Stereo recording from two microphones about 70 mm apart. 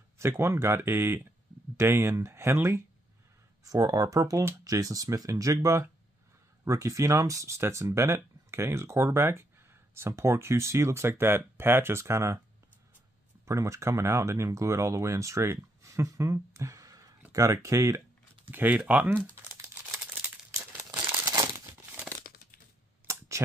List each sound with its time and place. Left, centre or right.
0.2 s speech: right
3.6 s speech: right
13.5 s speech: right
18.5 s speech: right
20.2 s crumpling: right
23.0 s clicking: right